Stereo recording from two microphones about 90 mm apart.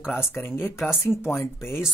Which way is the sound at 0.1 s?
25° left (ahead or behind).